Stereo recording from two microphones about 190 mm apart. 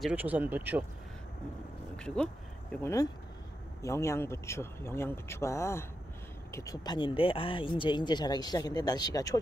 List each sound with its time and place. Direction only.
0.0 s speech: 10° right (ahead or behind)
2.0 s speech: 5° left (ahead or behind)
2.7 s speech: 15° left (ahead or behind)